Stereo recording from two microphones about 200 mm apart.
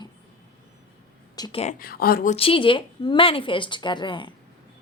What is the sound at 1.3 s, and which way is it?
Speech, 20° left (ahead or behind).